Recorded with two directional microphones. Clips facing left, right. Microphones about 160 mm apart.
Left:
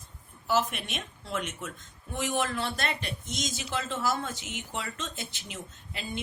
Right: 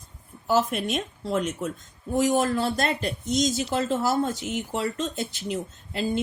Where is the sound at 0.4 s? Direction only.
40° right (ahead or behind).